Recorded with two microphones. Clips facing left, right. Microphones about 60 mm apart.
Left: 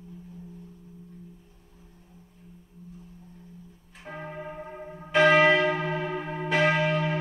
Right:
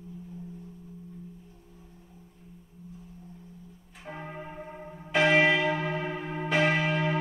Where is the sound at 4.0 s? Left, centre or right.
Centre.